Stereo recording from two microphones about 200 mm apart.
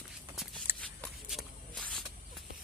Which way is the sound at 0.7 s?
10° right (ahead or behind).